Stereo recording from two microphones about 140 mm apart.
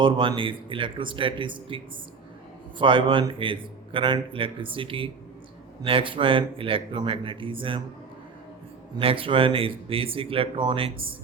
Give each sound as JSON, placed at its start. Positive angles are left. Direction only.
{"t": 0.0, "sound": "a man's voice", "side_deg": -35}
{"t": 9.0, "sound": "a man's voice", "side_deg": -40}